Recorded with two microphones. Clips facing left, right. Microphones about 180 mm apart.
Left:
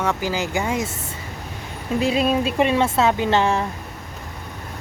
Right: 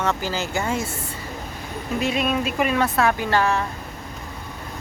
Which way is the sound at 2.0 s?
30° left (ahead or behind).